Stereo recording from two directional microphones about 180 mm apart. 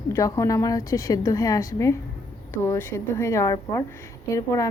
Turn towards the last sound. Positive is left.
turn(degrees=20)  # may be behind; listen again after turning